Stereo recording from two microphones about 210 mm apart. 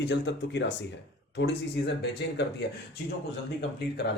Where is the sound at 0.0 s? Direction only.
55° left (ahead or behind).